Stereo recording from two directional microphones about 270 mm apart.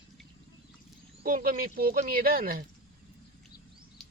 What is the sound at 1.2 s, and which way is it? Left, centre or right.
Speech, right.